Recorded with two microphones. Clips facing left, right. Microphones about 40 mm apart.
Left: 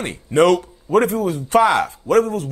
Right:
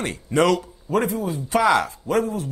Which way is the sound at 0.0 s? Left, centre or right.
Left.